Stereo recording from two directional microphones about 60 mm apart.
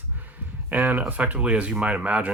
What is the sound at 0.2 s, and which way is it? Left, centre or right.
Speech, right.